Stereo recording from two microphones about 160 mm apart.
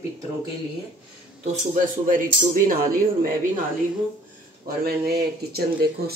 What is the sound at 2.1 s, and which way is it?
Speech, 60° right (ahead or behind).